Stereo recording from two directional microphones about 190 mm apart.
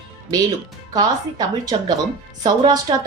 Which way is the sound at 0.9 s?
20° right (ahead or behind).